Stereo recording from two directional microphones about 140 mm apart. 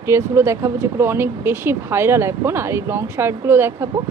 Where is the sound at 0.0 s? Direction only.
20° right (ahead or behind).